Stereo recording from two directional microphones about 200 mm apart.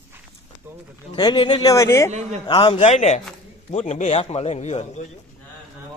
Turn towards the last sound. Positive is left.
turn(degrees=35)  # may be behind; listen again after turning